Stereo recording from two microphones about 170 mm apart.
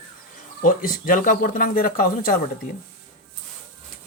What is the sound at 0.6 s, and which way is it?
Speech, 55° left (ahead or behind).